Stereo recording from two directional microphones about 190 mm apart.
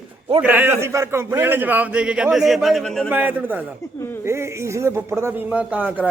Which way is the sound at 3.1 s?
10° right (ahead or behind).